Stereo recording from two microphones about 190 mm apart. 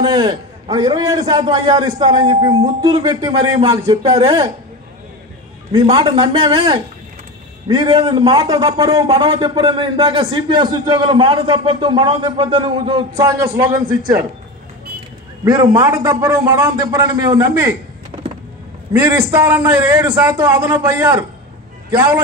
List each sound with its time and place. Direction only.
0.0 s speech: 20° right (ahead or behind)
5.7 s speech: 25° right (ahead or behind)
13.3 s a man's voice: 15° right (ahead or behind)
15.4 s a man's voice: 20° right (ahead or behind)
18.9 s a man's voice: 15° right (ahead or behind)